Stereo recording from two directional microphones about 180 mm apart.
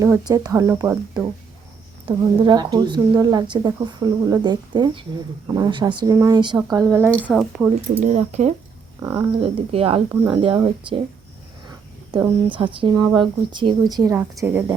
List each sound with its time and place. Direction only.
0.0 s speech: 20° right (ahead or behind)
2.0 s speech: 25° right (ahead or behind); by 7.7 s 5° right (ahead or behind)
7.9 s speech: 40° right (ahead or behind)
9.0 s speech: 15° right (ahead or behind)
9.4 s speech: 30° right (ahead or behind)
12.1 s speech: 25° right (ahead or behind)